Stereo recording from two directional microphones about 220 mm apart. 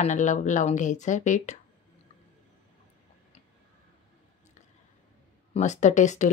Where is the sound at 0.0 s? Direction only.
35° left (ahead or behind).